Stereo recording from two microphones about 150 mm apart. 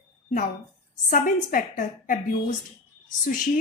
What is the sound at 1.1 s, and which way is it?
A woman's voice, 60° left (ahead or behind).